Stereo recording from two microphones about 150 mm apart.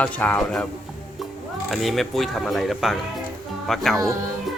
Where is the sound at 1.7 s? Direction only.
Centre (ahead or behind).